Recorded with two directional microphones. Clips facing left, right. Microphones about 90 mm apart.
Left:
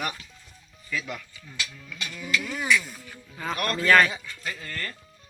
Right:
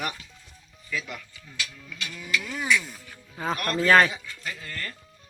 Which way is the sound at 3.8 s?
30° right (ahead or behind).